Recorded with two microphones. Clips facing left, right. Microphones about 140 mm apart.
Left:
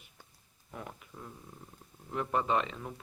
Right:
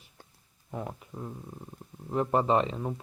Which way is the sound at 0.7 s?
30° right (ahead or behind).